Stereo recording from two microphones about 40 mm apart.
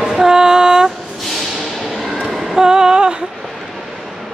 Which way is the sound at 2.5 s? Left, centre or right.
Centre.